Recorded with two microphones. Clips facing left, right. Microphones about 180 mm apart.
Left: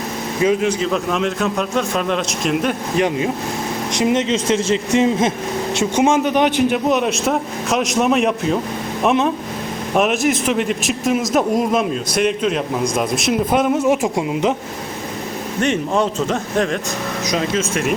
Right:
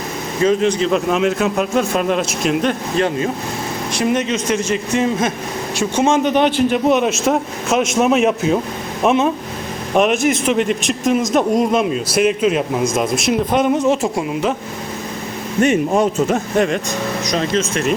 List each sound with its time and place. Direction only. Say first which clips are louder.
0.4 s speech: right 2 dB; 5° left (ahead or behind)
2.9 s a man's voice: even; 15° left (ahead or behind)
15.6 s a man's voice: right 3 dB; 10° right (ahead or behind); by 17.9 s 10° left (ahead or behind)